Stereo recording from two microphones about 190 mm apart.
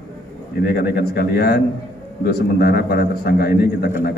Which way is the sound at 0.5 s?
60° left (ahead or behind).